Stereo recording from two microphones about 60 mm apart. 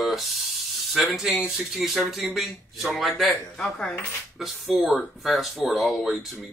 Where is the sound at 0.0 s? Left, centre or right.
Centre.